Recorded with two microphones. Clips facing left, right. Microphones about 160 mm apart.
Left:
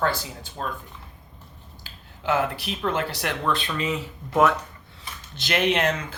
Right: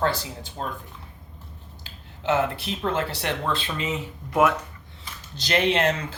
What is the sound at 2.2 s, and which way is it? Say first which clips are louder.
Speech: right 1 dB; 25° right (ahead or behind).